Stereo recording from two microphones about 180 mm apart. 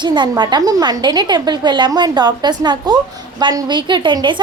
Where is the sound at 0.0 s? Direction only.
25° right (ahead or behind).